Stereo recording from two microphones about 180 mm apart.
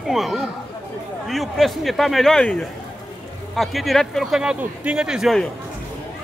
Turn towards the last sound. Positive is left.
turn(degrees=0)  # may be behind; listen again after turning